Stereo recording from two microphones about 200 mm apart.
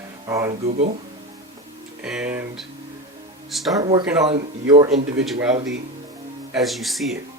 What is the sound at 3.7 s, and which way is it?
Speech, 20° right (ahead or behind).